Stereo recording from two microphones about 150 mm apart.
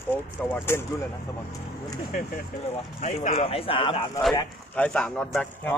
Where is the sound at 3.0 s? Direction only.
50° left (ahead or behind).